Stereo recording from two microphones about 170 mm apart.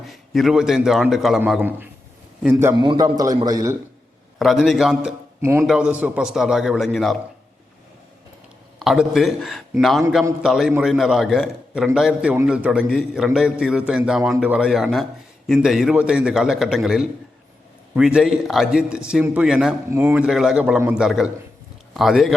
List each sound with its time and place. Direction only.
0.0 s a man's voice: centre (ahead or behind)
2.7 s a man's voice: 25° right (ahead or behind)
4.4 s a man's voice: centre (ahead or behind)
5.4 s speech: 15° right (ahead or behind)
5.6 s a man's voice: 5° right (ahead or behind)
8.8 s a man's voice: centre (ahead or behind)